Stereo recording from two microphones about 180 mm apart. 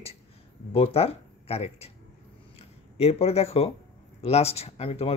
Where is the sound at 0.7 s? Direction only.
35° left (ahead or behind).